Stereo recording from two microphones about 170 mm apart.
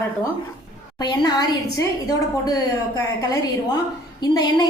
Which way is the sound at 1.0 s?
25° left (ahead or behind).